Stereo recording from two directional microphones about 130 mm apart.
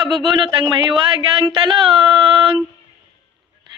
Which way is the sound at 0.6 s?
30° right (ahead or behind).